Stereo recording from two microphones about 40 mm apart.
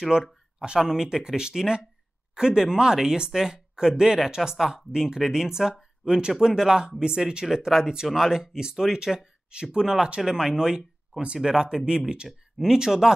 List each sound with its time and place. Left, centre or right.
0.1 s speech: right